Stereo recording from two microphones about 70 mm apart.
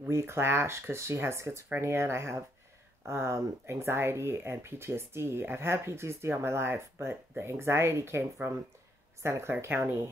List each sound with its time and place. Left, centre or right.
0.0 s speech: right